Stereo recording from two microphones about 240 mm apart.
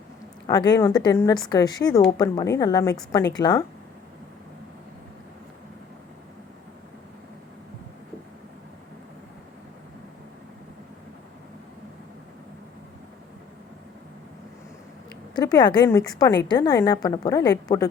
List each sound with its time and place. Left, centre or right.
0.4 s speech: centre
15.4 s a woman's voice: centre